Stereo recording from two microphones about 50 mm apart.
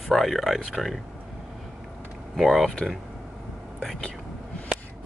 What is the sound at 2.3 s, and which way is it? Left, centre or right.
Speech, centre.